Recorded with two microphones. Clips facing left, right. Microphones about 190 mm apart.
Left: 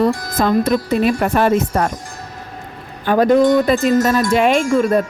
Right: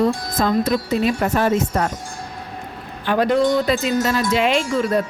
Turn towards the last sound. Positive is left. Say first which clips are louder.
# left 5 dB
turn(degrees=55)  # may be behind; listen again after turning